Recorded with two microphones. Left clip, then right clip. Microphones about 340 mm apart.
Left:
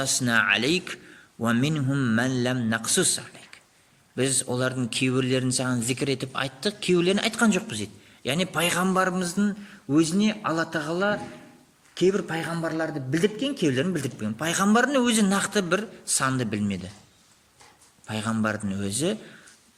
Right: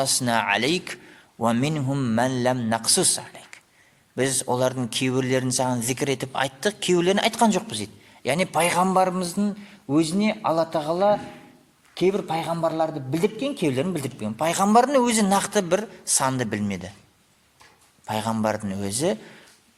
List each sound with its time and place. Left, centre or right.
0.0 s a man's voice: centre
18.1 s a man's voice: centre